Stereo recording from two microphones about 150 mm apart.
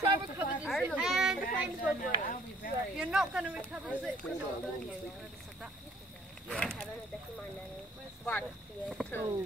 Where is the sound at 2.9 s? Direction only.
5° right (ahead or behind).